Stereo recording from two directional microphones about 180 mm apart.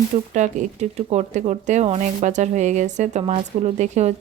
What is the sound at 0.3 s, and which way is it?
Speech, 40° right (ahead or behind).